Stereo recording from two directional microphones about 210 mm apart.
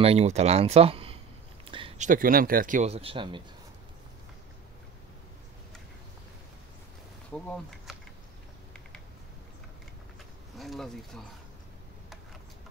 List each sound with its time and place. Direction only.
0.0 s speech: 30° right (ahead or behind)
1.6 s a sound: 25° right (ahead or behind)
2.0 s speech: 40° right (ahead or behind); by 3.4 s 25° right (ahead or behind)
7.3 s speech: centre (ahead or behind)
10.6 s speech: centre (ahead or behind)